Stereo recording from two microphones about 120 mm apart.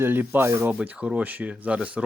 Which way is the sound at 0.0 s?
15° right (ahead or behind).